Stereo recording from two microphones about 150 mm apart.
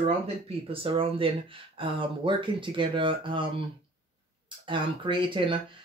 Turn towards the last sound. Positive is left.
turn(degrees=-35)  # may be behind; listen again after turning